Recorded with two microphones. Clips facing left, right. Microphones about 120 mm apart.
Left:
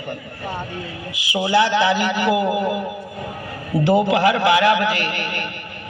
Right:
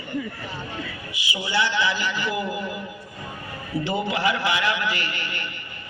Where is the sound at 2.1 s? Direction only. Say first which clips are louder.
Left 8 dB; 90° left.